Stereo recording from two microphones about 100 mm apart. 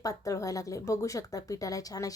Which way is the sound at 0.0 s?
35° left (ahead or behind).